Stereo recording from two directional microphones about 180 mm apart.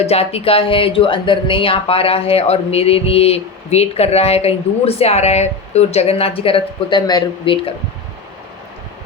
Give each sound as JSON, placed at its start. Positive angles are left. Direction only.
{"t": 0.0, "sound": "speech", "side_deg": 35}